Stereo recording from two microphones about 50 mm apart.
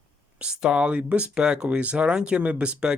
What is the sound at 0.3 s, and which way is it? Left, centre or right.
Speech, centre.